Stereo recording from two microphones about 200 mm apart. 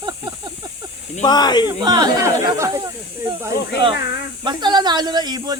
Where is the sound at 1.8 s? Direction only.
20° right (ahead or behind).